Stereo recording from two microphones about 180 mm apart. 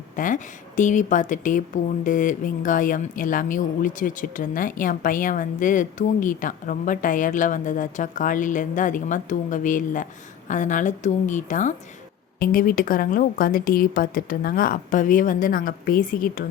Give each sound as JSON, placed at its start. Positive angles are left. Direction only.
{"t": 0.2, "sound": "a woman's voice", "side_deg": 45}